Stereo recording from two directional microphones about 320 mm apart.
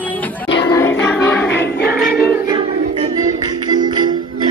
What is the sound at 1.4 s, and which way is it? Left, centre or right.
Choir, left.